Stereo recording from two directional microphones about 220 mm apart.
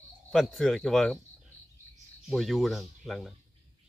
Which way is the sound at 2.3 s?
Centre (ahead or behind).